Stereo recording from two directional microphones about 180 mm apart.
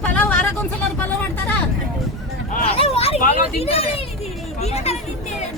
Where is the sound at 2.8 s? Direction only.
35° left (ahead or behind).